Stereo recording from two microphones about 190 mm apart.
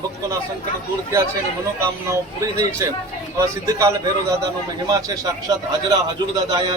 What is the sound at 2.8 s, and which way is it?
A man's voice, 15° right (ahead or behind).